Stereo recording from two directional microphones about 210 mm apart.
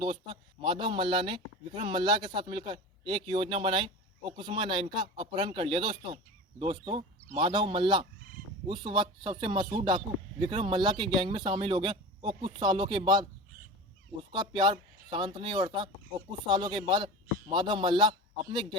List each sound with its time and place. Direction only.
0.6 s a man's voice: 25° right (ahead or behind)
14.3 s a man's voice: 25° right (ahead or behind)